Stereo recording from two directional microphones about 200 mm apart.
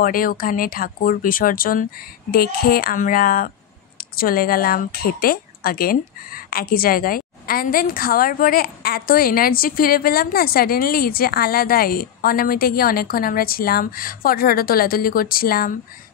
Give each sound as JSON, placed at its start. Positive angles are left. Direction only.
{"t": 0.0, "sound": "speech", "side_deg": 45}